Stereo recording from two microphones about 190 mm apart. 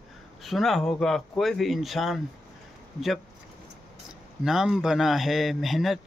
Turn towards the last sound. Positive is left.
turn(degrees=0)  # may be behind; listen again after turning